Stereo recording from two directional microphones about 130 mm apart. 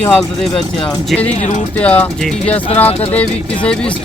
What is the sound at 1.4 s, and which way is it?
Speech, 65° left (ahead or behind).